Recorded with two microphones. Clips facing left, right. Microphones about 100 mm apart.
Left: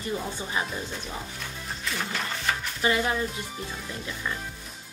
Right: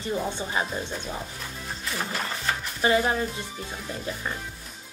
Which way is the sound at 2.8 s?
30° right (ahead or behind).